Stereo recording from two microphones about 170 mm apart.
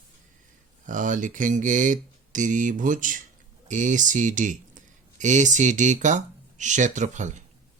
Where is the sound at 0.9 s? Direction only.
50° right (ahead or behind).